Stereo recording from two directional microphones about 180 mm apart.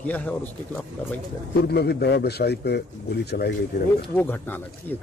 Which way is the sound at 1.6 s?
65° left (ahead or behind).